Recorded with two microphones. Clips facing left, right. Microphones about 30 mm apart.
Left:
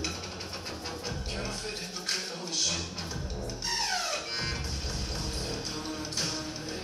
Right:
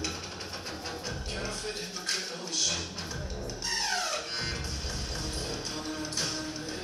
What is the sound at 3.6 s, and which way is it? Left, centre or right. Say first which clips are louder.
Music: even; centre.